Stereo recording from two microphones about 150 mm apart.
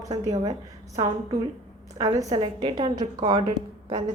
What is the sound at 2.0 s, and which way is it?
A woman's voice, 30° right (ahead or behind).